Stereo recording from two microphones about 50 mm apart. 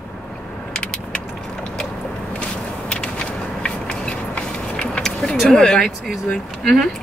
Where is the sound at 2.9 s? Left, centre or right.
Centre.